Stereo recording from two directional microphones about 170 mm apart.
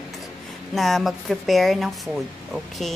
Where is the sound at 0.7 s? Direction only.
Centre (ahead or behind).